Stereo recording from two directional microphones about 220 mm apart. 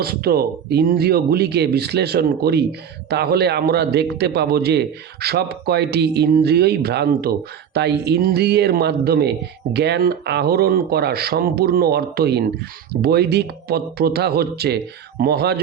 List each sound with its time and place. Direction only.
0.0 s a man's voice: 45° right (ahead or behind)